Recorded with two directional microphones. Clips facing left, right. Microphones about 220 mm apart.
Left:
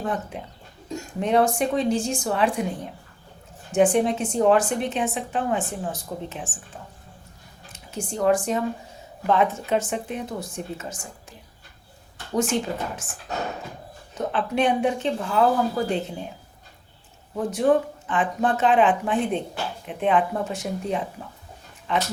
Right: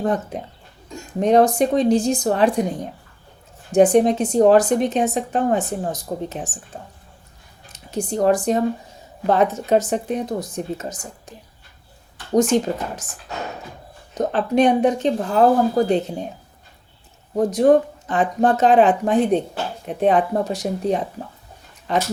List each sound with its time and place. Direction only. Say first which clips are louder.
0.0 s a woman's voice: right 6 dB; 40° right (ahead or behind)
3.7 s a woman's voice: right 5 dB; 40° right (ahead or behind)
7.7 s a woman's voice: right 7 dB; 35° right (ahead or behind)
14.2 s a woman's voice: right 6 dB; 40° right (ahead or behind)
17.3 s a woman's voice: right 6 dB; 40° right (ahead or behind)